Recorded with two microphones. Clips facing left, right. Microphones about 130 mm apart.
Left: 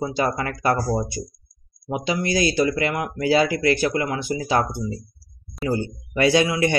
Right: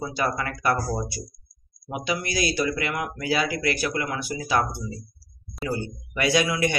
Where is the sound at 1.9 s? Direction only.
25° left (ahead or behind).